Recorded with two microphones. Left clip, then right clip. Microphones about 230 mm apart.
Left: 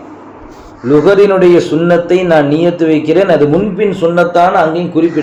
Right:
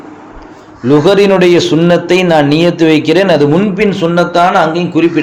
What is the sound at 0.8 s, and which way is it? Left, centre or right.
Speech, right.